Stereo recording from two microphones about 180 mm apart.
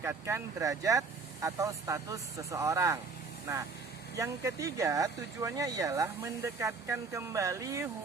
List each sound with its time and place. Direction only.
0.0 s speech: 15° right (ahead or behind)